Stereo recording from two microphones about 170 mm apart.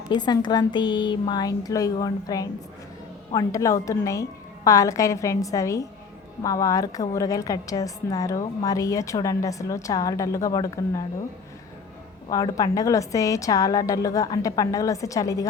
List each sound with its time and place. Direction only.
0.1 s a woman's voice: 25° left (ahead or behind)
12.3 s a woman's voice: 20° left (ahead or behind)